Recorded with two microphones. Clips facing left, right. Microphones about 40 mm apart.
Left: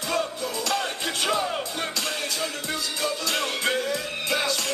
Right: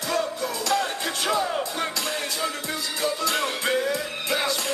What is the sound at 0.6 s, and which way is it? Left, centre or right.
Music, left.